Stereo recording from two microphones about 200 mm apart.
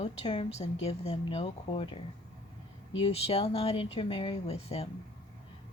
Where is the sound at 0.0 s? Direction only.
30° left (ahead or behind).